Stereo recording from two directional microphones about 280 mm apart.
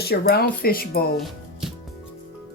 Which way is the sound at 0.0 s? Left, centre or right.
Left.